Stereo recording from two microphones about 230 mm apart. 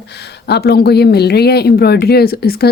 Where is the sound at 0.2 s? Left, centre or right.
Left.